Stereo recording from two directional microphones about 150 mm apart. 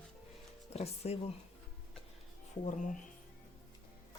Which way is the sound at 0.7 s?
45° left (ahead or behind).